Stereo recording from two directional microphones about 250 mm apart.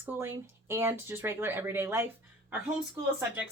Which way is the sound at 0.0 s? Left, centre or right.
Centre.